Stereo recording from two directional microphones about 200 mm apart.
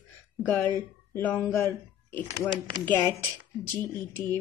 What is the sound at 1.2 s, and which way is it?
Speech, 10° left (ahead or behind).